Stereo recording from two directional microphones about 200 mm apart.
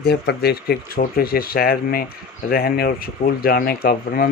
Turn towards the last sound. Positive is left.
turn(degrees=50)  # may be behind; listen again after turning